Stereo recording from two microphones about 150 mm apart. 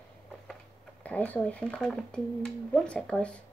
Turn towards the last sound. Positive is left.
turn(degrees=5)  # may be behind; listen again after turning